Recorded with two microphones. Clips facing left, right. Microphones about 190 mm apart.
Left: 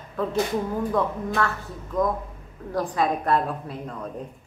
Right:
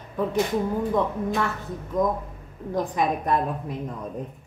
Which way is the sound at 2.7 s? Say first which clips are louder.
Even; 15° right (ahead or behind).